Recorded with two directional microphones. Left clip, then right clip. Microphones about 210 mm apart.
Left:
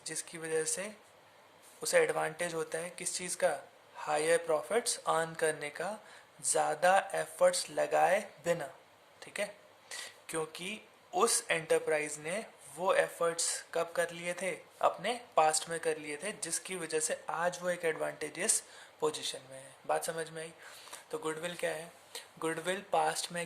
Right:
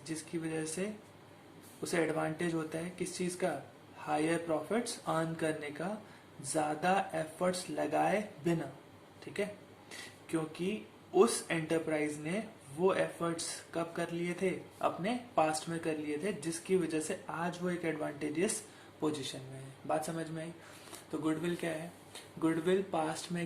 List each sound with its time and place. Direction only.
0.0 s speech: 50° left (ahead or behind)
1.8 s speech: 50° left (ahead or behind)